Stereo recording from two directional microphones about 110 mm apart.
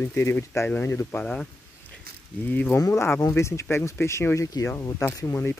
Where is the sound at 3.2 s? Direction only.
30° left (ahead or behind).